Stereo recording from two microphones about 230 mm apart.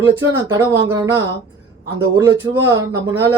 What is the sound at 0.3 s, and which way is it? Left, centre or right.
Speech, centre.